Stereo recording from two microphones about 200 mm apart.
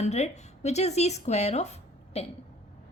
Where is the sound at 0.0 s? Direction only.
35° left (ahead or behind).